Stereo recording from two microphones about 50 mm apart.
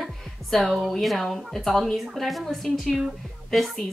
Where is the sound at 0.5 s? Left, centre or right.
Centre.